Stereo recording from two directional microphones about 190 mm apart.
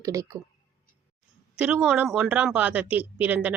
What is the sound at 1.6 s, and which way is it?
Speech, 5° right (ahead or behind).